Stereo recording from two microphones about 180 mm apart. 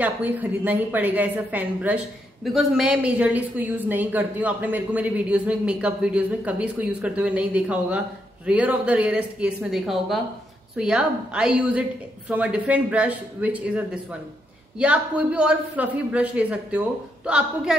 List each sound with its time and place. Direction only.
0.0 s a woman's voice: 10° right (ahead or behind)